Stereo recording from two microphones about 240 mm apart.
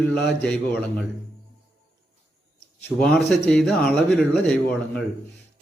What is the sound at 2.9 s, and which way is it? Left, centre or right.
Speech, centre.